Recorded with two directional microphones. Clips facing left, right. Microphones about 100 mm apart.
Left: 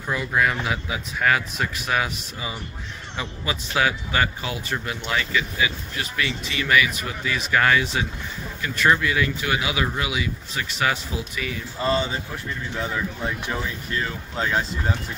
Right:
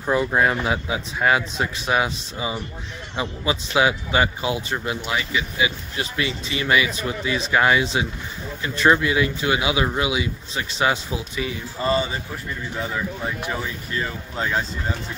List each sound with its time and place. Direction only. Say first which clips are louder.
0.0 s a man's voice: right 4 dB; 30° right (ahead or behind)
11.8 s speech: right 1 dB; 5° right (ahead or behind)
14.3 s speech: even; centre (ahead or behind)